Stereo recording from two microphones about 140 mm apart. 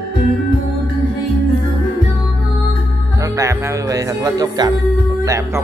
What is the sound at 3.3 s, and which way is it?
Speech, 25° right (ahead or behind).